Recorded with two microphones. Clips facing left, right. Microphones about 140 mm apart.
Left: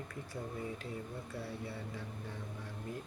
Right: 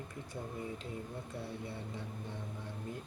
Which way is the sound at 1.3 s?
20° right (ahead or behind).